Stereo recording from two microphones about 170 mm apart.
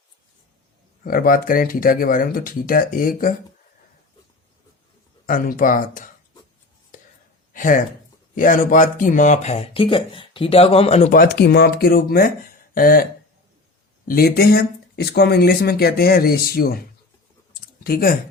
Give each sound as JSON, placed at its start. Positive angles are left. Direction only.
{"t": 1.0, "sound": "speech", "side_deg": 55}
{"t": 5.2, "sound": "speech", "side_deg": 55}
{"t": 7.5, "sound": "speech", "side_deg": 50}
{"t": 11.1, "sound": "speech", "side_deg": 60}
{"t": 17.5, "sound": "clicking", "side_deg": 60}